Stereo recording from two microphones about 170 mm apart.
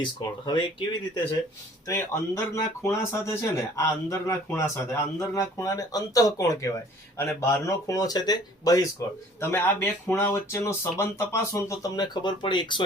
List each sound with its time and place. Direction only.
0.0 s speech: 25° left (ahead or behind)
1.9 s speech: 15° left (ahead or behind)